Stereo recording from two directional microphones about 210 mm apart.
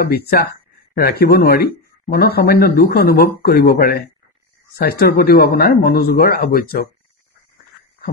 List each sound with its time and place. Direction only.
0.0 s speech: 50° left (ahead or behind)